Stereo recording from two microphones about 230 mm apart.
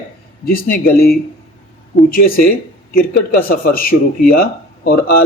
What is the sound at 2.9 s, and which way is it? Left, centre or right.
Speech, left.